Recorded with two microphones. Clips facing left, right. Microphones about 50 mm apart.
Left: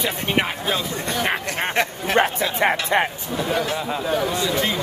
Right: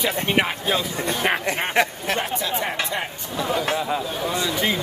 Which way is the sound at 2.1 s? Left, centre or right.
Left.